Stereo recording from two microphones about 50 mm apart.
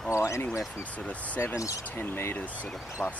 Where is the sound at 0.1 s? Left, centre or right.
Left.